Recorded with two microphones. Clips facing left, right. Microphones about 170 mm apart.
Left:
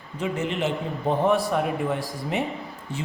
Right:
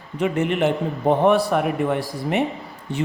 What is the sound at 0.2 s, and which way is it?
A man's voice, 60° right (ahead or behind).